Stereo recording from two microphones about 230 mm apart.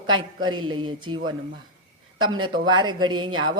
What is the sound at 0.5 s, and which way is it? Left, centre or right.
Speech, right.